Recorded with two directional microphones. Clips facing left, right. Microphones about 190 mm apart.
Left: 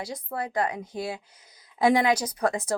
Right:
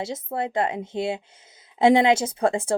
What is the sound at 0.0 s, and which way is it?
Speech, 25° right (ahead or behind).